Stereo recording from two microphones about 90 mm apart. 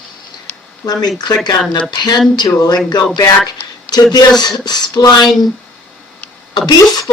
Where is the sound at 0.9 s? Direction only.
50° left (ahead or behind).